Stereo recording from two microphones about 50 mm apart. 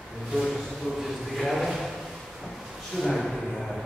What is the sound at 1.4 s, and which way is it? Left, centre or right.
Drawer open or close, centre.